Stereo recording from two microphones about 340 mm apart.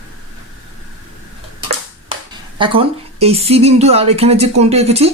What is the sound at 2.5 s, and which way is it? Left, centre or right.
A woman's voice, centre.